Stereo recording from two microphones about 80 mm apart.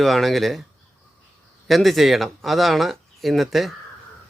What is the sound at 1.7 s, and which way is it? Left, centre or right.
Speech, centre.